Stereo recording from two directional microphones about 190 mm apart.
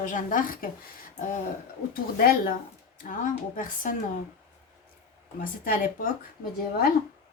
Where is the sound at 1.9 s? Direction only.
50° left (ahead or behind).